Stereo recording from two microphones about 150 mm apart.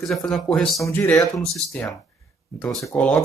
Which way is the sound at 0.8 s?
15° left (ahead or behind).